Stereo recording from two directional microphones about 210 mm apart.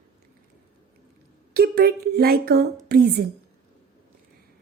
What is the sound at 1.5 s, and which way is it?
Speech, 50° right (ahead or behind).